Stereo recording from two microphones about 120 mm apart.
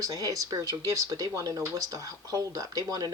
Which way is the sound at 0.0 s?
30° right (ahead or behind).